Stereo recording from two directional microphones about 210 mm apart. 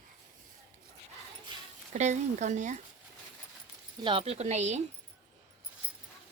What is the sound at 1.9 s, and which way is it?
Speech, 35° right (ahead or behind).